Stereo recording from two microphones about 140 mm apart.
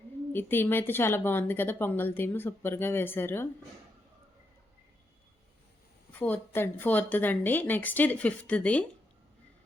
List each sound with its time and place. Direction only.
0.3 s speech: 15° left (ahead or behind)
6.1 s speech: 10° left (ahead or behind)